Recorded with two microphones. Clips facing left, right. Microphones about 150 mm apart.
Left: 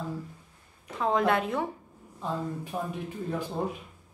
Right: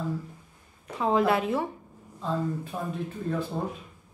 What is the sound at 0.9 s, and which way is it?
Speech, 5° right (ahead or behind).